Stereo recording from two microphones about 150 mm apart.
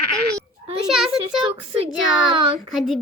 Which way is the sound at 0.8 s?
5° right (ahead or behind).